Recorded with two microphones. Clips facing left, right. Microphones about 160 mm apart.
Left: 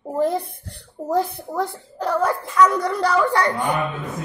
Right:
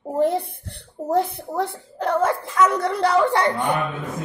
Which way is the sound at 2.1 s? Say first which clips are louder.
Left 2 dB; 25° right (ahead or behind).